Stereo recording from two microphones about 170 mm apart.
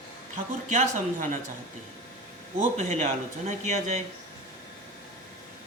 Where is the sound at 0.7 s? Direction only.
45° right (ahead or behind).